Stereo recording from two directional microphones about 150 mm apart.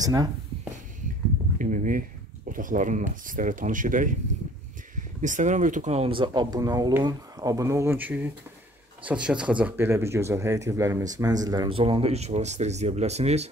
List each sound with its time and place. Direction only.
0.0 s speech: 25° right (ahead or behind)
1.6 s speech: 60° right (ahead or behind); by 11.8 s 25° right (ahead or behind)
11.8 s speech: 40° right (ahead or behind)